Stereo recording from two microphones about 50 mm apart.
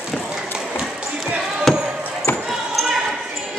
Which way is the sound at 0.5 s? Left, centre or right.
Centre.